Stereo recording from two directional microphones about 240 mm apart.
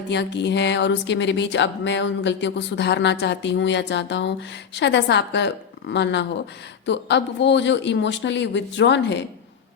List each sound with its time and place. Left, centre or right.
0.1 s speech: left